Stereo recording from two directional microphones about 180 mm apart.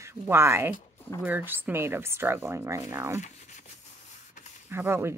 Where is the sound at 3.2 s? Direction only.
40° left (ahead or behind).